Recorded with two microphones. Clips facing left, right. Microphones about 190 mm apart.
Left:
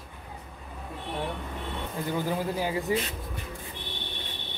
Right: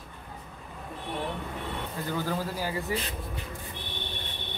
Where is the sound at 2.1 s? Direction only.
15° left (ahead or behind).